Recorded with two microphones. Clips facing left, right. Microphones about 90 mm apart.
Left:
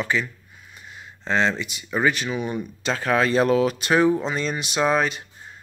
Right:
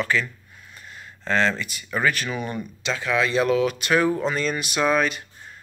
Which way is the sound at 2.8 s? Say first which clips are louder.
Left 2 dB; 40° left (ahead or behind).